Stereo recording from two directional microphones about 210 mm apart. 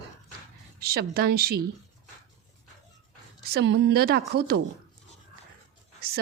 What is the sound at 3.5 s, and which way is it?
Speech, 55° right (ahead or behind).